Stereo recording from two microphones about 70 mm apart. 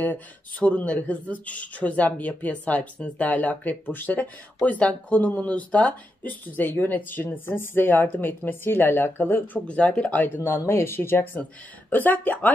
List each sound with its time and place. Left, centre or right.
0.0 s speech: left
9.7 s speech: centre
10.2 s speech: left